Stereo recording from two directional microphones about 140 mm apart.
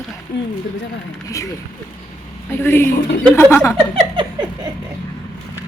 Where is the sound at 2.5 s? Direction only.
15° left (ahead or behind).